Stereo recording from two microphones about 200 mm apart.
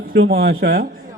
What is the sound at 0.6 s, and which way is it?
Speech, 50° right (ahead or behind).